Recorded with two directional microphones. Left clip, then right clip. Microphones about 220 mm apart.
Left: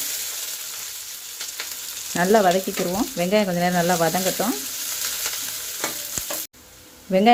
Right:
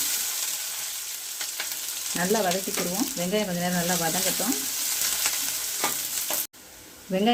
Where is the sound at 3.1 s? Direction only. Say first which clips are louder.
Left 9 dB; 30° left (ahead or behind).